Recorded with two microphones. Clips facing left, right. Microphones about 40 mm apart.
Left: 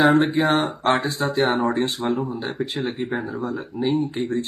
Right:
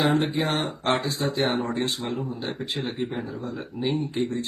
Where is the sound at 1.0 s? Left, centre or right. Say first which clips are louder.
Left 3 dB; left.